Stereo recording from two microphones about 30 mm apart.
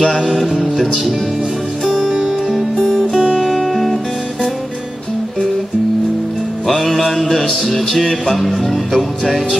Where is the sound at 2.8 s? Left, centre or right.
Centre.